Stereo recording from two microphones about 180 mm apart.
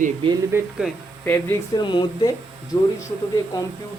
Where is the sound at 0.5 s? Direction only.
15° right (ahead or behind).